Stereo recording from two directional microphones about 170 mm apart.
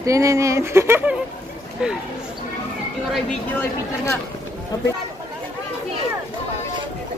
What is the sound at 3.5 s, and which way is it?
Speech, 10° left (ahead or behind).